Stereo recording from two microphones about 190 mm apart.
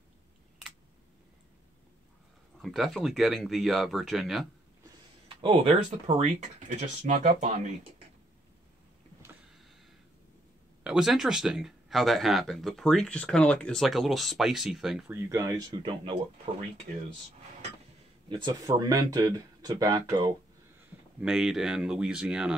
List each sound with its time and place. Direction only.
2.6 s speech: centre (ahead or behind)
5.3 s speech: 30° right (ahead or behind)
10.8 s speech: 5° right (ahead or behind); by 16.2 s 25° right (ahead or behind)
18.3 s speech: 25° right (ahead or behind)
21.2 s speech: centre (ahead or behind)